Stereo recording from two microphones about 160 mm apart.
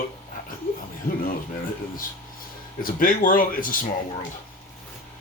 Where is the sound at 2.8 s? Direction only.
60° left (ahead or behind).